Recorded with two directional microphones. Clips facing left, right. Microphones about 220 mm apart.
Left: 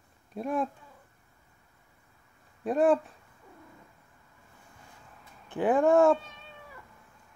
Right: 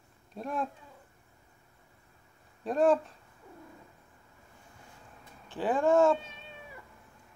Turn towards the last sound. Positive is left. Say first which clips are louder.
# left 3 dB
turn(degrees=15)  # may be behind; listen again after turning